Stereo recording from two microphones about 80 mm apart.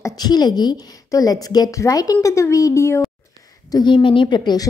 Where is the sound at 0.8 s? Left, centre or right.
Left.